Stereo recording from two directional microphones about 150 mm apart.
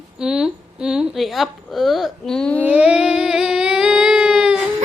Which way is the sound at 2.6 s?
5° right (ahead or behind).